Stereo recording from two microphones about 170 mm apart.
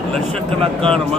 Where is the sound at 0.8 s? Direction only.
5° left (ahead or behind).